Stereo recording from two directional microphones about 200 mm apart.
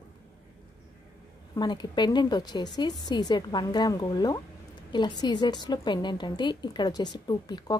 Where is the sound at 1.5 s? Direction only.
20° left (ahead or behind).